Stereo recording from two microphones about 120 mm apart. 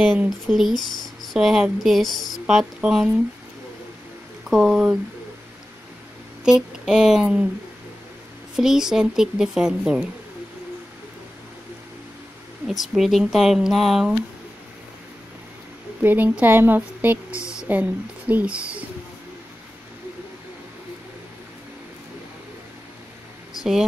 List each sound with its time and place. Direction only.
0.3 s a woman's voice: centre (ahead or behind)
4.5 s a woman's voice: 5° right (ahead or behind)
6.4 s a woman's voice: 5° right (ahead or behind)
8.5 s a woman's voice: 5° right (ahead or behind)
12.6 s a woman's voice: centre (ahead or behind)
16.0 s a woman's voice: 15° right (ahead or behind)
23.6 s speech: 5° right (ahead or behind)